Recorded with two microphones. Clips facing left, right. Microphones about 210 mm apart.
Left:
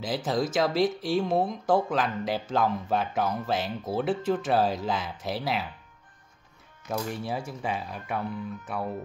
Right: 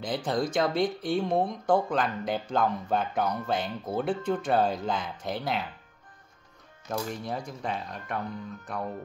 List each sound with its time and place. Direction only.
0.0 s speech: 5° left (ahead or behind)
6.9 s speech: 10° left (ahead or behind)